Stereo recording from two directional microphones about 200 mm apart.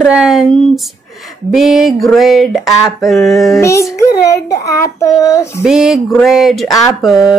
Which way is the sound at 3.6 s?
15° left (ahead or behind).